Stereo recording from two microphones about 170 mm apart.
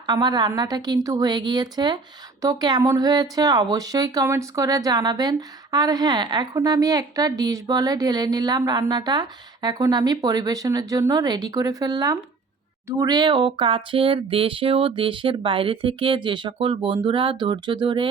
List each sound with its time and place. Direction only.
0.0 s speech: 25° right (ahead or behind)